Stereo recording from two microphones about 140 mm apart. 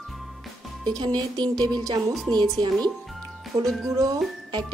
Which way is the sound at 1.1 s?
30° right (ahead or behind).